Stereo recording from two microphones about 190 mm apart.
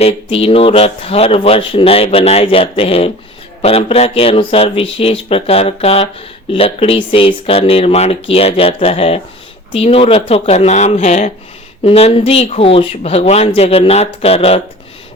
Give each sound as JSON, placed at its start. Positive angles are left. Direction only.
{"t": 0.0, "sound": "speech", "side_deg": 30}